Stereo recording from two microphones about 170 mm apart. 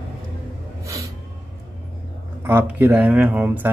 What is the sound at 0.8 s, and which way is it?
Vehicle, 20° right (ahead or behind).